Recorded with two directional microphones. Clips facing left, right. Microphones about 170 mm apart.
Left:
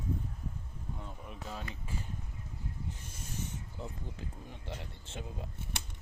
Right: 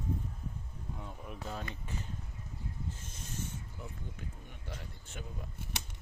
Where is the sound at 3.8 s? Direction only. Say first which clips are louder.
Left 3 dB; 30° left (ahead or behind).